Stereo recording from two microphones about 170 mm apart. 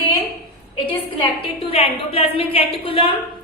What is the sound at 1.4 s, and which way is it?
A woman's voice, 35° left (ahead or behind).